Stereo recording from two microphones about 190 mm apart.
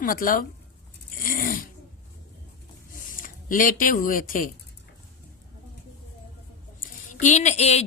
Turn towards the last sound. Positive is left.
turn(degrees=35)  # may be behind; listen again after turning